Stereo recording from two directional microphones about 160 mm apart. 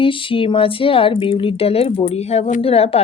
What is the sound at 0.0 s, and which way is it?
Speech, 35° left (ahead or behind).